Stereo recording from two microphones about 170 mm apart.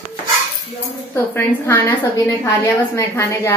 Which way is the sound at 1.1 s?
15° left (ahead or behind).